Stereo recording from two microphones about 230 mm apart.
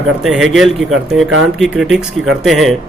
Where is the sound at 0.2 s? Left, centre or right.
Centre.